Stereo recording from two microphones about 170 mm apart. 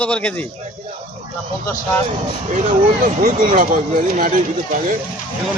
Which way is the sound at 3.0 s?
50° right (ahead or behind).